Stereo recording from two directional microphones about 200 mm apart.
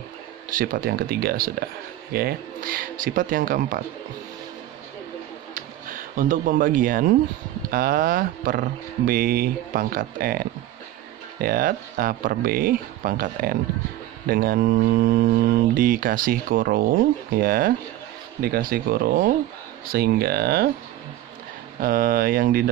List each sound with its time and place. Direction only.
0.5 s speech: 45° right (ahead or behind)
5.5 s speech: 40° right (ahead or behind)
21.7 s speech: 45° right (ahead or behind)